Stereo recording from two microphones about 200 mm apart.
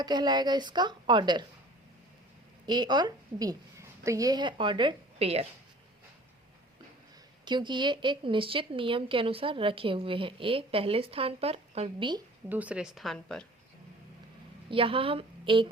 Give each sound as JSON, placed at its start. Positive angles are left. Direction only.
{"t": 0.0, "sound": "speech", "side_deg": -20}
{"t": 2.6, "sound": "a woman's voice", "side_deg": -20}
{"t": 7.4, "sound": "speech", "side_deg": -25}
{"t": 12.5, "sound": "speech", "side_deg": -5}
{"t": 14.7, "sound": "a woman's voice", "side_deg": -25}